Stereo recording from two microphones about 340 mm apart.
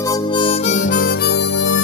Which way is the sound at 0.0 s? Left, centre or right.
Centre.